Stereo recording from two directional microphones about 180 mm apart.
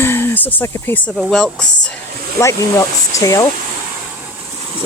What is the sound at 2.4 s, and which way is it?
Speech, 15° left (ahead or behind).